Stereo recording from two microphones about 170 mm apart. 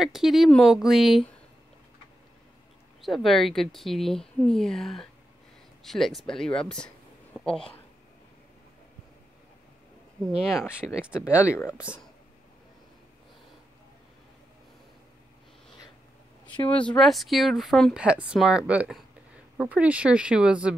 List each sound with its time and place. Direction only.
0.0 s speech: centre (ahead or behind)
3.0 s speech: centre (ahead or behind)
10.5 s speech: centre (ahead or behind)
11.4 s speech: 15° left (ahead or behind)
16.5 s speech: 30° left (ahead or behind)
16.8 s speech: 5° left (ahead or behind)